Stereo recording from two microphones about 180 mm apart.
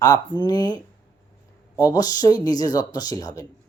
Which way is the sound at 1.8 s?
20° left (ahead or behind).